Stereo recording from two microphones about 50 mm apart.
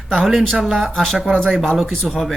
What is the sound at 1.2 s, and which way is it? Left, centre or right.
Speech, centre.